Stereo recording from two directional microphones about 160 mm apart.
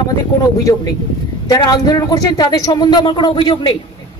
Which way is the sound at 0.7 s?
30° left (ahead or behind).